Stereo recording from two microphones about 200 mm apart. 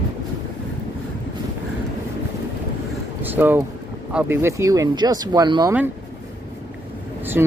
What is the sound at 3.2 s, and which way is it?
Speech, 10° right (ahead or behind).